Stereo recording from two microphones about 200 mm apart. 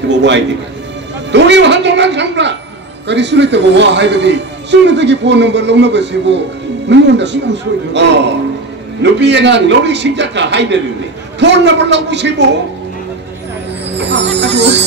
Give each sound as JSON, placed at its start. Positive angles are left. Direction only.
{"t": 0.1, "sound": "a man's voice", "side_deg": -60}
{"t": 13.8, "sound": "speech", "side_deg": -60}